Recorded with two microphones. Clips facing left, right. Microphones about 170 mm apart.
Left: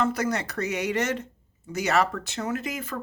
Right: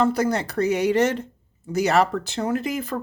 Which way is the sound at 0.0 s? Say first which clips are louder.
Right 5 dB; 30° right (ahead or behind).